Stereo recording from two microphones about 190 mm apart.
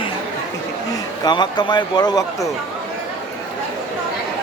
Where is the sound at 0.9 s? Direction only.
20° left (ahead or behind).